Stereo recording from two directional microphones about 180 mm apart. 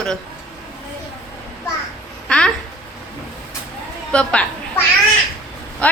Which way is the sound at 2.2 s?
5° left (ahead or behind).